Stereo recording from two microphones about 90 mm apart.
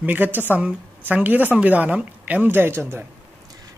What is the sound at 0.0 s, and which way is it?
Speech, 20° right (ahead or behind).